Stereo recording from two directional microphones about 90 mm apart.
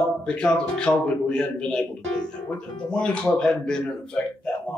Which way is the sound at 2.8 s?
10° left (ahead or behind).